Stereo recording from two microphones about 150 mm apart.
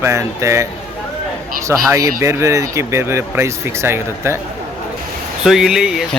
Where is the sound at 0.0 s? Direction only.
20° right (ahead or behind).